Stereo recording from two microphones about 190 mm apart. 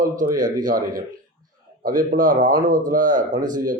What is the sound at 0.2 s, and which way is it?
Speech, 45° right (ahead or behind).